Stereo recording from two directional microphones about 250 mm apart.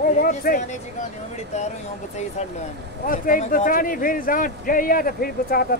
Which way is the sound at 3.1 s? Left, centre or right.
Left.